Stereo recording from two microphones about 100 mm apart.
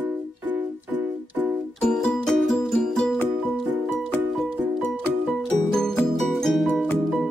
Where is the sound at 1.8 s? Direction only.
5° left (ahead or behind).